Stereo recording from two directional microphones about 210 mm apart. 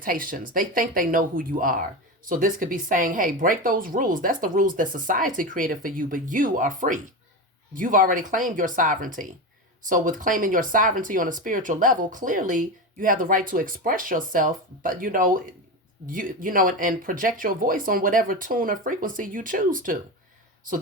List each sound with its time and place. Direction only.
0.0 s speech: 40° right (ahead or behind)